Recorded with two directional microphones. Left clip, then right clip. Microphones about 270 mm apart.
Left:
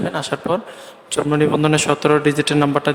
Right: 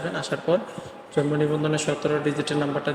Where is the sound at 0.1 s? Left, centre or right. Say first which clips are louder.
Right 1 dB; left.